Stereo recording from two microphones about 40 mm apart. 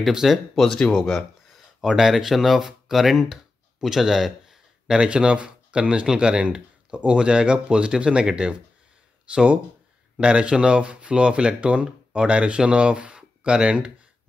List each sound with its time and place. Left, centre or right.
0.1 s speech: centre
0.7 s speech: left
1.1 s speech: centre
3.8 s a sound: centre
4.9 s speech: right